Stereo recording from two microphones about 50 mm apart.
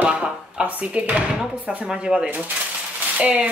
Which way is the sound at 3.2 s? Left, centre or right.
Right.